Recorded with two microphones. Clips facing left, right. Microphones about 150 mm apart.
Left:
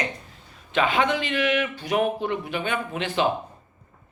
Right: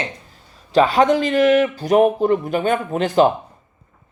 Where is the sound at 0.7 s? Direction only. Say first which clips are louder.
Right 8 dB; 40° right (ahead or behind).